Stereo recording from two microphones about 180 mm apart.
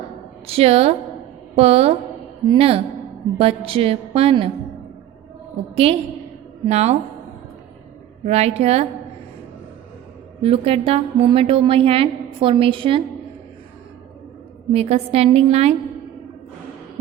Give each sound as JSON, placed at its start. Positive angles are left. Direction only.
{"t": 0.4, "sound": "a woman's voice", "side_deg": -35}
{"t": 5.7, "sound": "a woman's voice", "side_deg": -35}
{"t": 8.2, "sound": "a woman's voice", "side_deg": -35}
{"t": 10.4, "sound": "a woman's voice", "side_deg": -30}
{"t": 14.7, "sound": "a woman's voice", "side_deg": -35}